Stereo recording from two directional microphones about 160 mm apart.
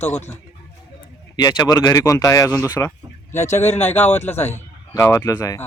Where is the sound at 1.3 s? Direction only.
25° left (ahead or behind).